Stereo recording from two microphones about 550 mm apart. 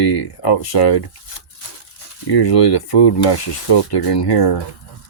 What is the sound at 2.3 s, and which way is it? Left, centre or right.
Rub, left.